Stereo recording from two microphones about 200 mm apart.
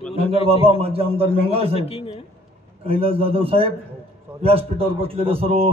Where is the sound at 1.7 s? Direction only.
30° left (ahead or behind).